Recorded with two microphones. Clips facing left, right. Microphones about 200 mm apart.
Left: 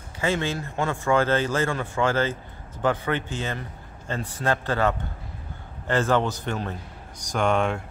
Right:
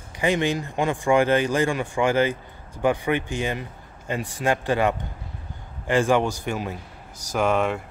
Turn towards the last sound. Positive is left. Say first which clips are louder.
# right 1 dB
turn(degrees=-5)  # may be behind; listen again after turning